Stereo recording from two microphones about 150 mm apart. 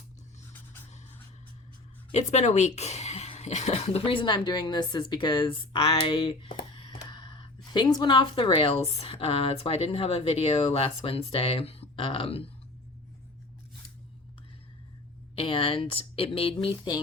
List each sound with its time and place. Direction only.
2.1 s speech: 50° left (ahead or behind)
15.4 s speech: 35° left (ahead or behind)